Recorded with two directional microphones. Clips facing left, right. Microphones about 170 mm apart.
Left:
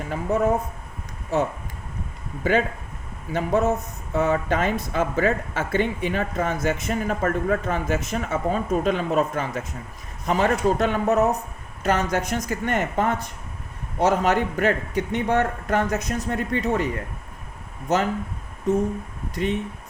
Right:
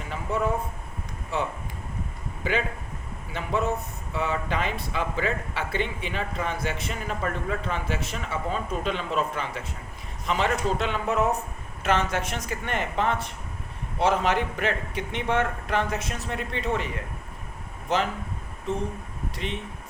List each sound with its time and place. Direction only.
0.1 s speech: 45° left (ahead or behind)
2.4 s speech: 45° left (ahead or behind)
19.3 s speech: 45° left (ahead or behind)